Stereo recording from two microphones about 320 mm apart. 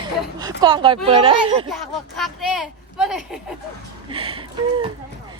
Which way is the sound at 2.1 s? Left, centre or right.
Centre.